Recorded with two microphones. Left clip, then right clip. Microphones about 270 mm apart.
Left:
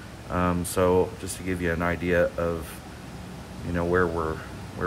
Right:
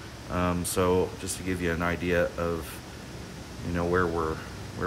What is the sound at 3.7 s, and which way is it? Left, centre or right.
Speech, centre.